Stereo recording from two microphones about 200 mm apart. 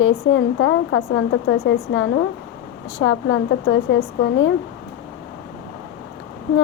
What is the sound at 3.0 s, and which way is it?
Speech, 85° left.